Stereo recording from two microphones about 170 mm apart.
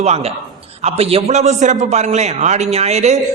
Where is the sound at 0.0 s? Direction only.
40° right (ahead or behind).